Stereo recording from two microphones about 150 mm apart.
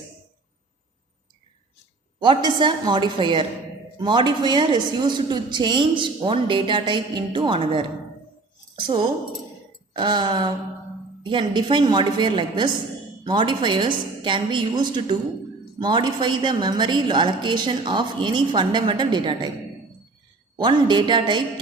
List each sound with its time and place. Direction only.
2.1 s a woman's voice: 30° right (ahead or behind)
9.9 s a woman's voice: 30° right (ahead or behind)
20.6 s a woman's voice: 30° right (ahead or behind)